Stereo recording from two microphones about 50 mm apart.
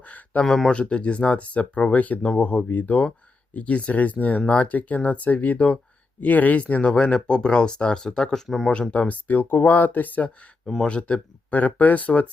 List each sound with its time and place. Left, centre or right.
0.4 s speech: centre
0.7 s speech: left
8.4 s speech: centre
8.7 s speech: left
10.8 s speech: left
11.6 s speech: left